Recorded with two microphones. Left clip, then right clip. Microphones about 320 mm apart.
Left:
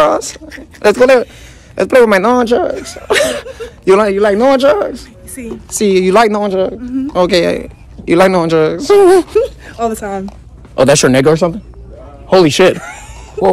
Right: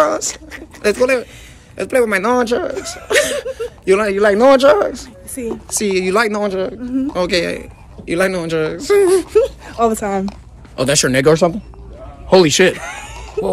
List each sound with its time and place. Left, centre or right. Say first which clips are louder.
0.0 s a sound: left 4 dB; centre
0.8 s a man's voice: left 7 dB; centre
5.3 s a woman's voice: right 2 dB; centre
5.7 s a man's voice: left 7 dB; centre
6.8 s speech: left 1 dB; centre
7.1 s a man's voice: left 7 dB; centre
9.3 s speech: left 1 dB; centre
9.8 s speech: right 1 dB; centre
10.8 s a man's voice: left 6 dB; centre
12.7 s speech: left 1 dB; right